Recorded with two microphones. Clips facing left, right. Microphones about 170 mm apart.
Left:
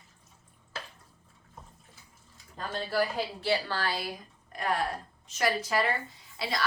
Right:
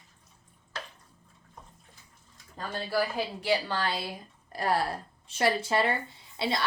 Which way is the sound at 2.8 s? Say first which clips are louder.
Even; 15° right (ahead or behind).